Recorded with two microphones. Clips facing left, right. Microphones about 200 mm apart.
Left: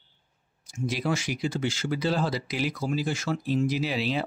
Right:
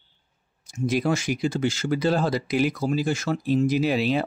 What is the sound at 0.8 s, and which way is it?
Speech, 45° right (ahead or behind).